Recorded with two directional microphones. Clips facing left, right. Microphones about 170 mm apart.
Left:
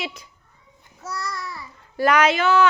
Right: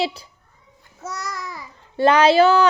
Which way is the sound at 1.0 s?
20° right (ahead or behind).